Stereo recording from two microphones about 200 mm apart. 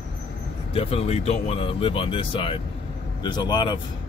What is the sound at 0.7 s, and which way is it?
Speech, 30° left (ahead or behind).